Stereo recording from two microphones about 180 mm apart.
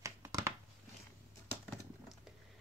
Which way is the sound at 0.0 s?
20° right (ahead or behind).